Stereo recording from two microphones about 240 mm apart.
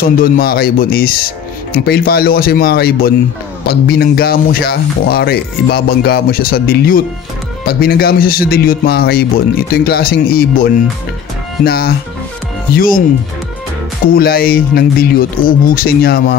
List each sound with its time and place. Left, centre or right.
0.0 s speech: left
14.0 s speech: left